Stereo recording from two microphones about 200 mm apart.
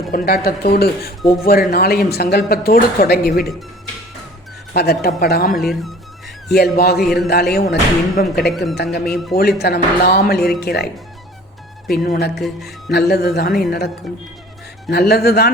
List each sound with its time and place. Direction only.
0.1 s speech: 45° left (ahead or behind)
4.7 s speech: 50° left (ahead or behind)
5.5 s speech: centre (ahead or behind)
6.7 s speech: 50° left (ahead or behind)
7.0 s speech: centre (ahead or behind)
7.5 s speech: 50° left (ahead or behind)
11.9 s speech: 55° left (ahead or behind)